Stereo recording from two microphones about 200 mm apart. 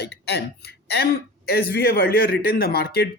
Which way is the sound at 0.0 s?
55° left (ahead or behind).